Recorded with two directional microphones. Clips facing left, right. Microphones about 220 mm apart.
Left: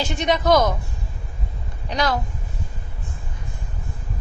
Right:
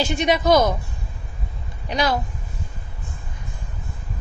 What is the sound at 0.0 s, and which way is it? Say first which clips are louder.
Speech: right 2 dB; 10° right (ahead or behind).